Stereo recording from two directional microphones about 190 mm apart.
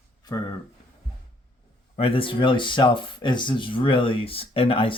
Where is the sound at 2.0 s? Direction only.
30° left (ahead or behind).